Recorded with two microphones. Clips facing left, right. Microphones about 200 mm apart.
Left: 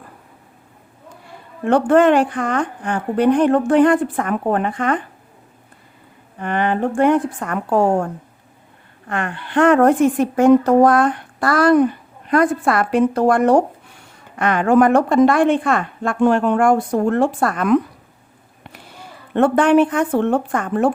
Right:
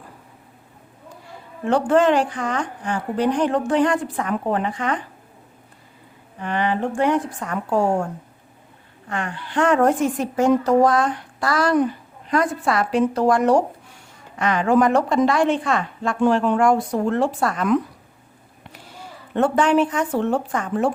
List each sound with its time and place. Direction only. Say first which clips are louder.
1.6 s a woman's voice: left 4 dB; 55° left (ahead or behind)
6.4 s a woman's voice: left 3 dB; 55° left (ahead or behind)